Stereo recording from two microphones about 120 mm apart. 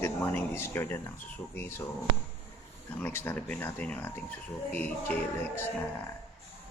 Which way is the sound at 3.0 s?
15° left (ahead or behind).